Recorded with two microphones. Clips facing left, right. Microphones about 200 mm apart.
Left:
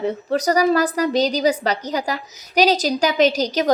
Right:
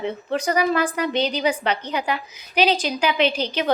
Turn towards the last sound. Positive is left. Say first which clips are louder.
# left 4 dB
turn(degrees=40)  # may be behind; listen again after turning